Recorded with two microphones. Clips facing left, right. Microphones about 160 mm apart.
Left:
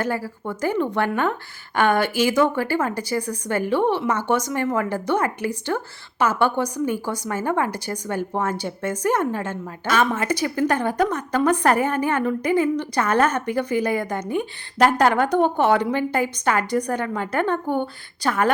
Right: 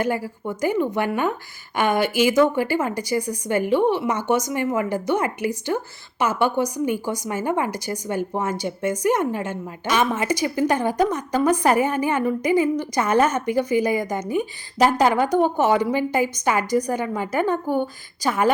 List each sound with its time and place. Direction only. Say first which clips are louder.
0.0 s a woman's voice: right 2 dB; 15° right (ahead or behind)